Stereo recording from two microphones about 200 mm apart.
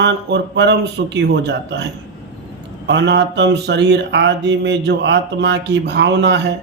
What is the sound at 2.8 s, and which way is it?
Mantra, 60° right (ahead or behind).